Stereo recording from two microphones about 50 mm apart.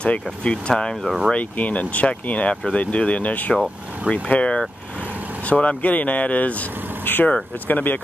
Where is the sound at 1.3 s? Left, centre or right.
Left.